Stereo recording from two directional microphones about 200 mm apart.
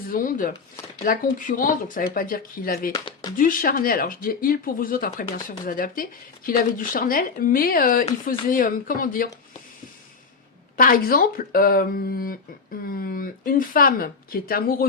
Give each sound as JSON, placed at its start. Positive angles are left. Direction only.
{"t": 0.1, "sound": "speech", "side_deg": 45}
{"t": 2.9, "sound": "speech", "side_deg": 20}
{"t": 3.3, "sound": "speech", "side_deg": 45}
{"t": 10.8, "sound": "speech", "side_deg": 45}